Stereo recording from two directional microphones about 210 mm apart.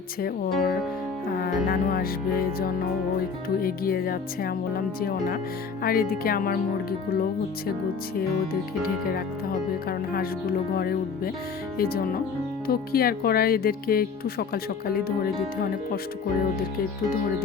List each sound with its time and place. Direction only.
0.2 s speech: 45° left (ahead or behind)
1.9 s speech: 45° left (ahead or behind)
10.8 s speech: 45° left (ahead or behind)
12.6 s speech: 45° left (ahead or behind)